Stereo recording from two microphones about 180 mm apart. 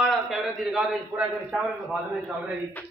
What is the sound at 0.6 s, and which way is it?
A man's voice, centre (ahead or behind).